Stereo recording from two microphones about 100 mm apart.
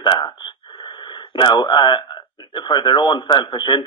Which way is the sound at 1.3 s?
50° left (ahead or behind).